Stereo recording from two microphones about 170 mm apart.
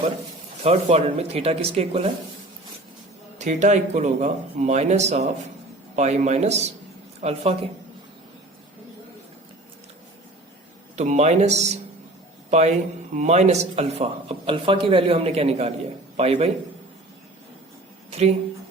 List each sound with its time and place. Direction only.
0.6 s speech: 40° right (ahead or behind)
3.3 s speech: 45° right (ahead or behind)
10.9 s speech: 40° right (ahead or behind)
18.1 s speech: 40° right (ahead or behind)